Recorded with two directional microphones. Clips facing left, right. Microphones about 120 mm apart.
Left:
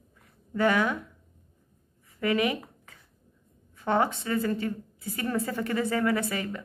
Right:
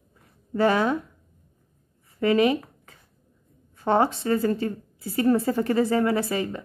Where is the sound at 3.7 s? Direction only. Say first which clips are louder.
Right 4 dB; 35° right (ahead or behind).